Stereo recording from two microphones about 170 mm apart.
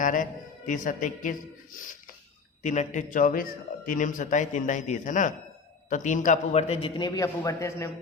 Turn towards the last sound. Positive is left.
turn(degrees=15)  # may be behind; listen again after turning